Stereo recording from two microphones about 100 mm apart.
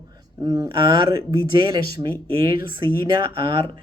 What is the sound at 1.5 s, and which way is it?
Speech, 50° right (ahead or behind).